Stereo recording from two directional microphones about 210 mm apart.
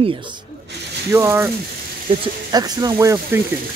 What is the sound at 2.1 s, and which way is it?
Speech, 25° right (ahead or behind).